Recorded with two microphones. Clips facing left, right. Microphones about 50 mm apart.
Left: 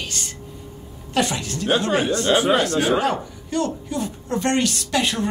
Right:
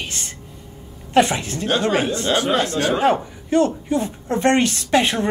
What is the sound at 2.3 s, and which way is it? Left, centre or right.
Speech, centre.